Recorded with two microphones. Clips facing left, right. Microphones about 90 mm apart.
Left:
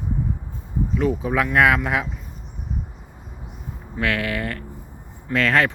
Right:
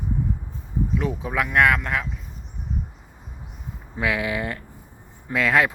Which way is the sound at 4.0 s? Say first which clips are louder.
Left 1 dB; 15° right (ahead or behind).